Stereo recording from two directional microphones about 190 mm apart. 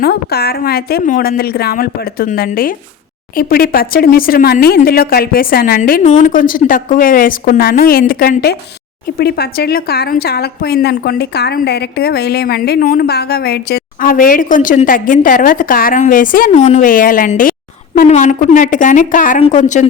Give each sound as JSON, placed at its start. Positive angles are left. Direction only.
{"t": 0.0, "sound": "a woman's voice", "side_deg": 55}